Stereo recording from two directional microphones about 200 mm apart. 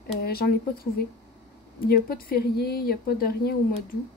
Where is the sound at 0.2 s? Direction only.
50° left (ahead or behind).